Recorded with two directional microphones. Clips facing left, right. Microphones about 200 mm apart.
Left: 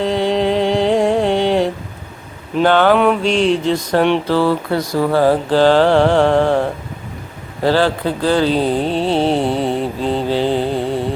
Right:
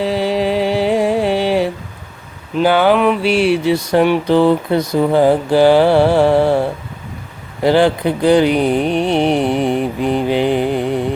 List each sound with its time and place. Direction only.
0.0 s music: 5° right (ahead or behind)
2.6 s speech: 10° right (ahead or behind)